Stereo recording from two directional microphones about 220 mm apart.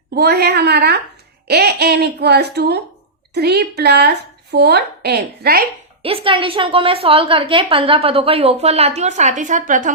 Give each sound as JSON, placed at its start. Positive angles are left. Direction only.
{"t": 0.1, "sound": "a woman's voice", "side_deg": -45}
{"t": 6.0, "sound": "a woman's voice", "side_deg": -25}